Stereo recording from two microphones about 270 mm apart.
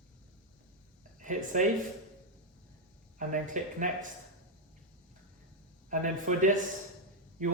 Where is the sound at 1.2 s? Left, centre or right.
Right.